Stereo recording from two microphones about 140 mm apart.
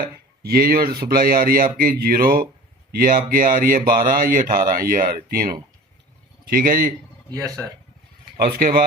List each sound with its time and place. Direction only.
0.0 s speech: 90° right
7.3 s speech: 25° right (ahead or behind)
8.4 s speech: 90° right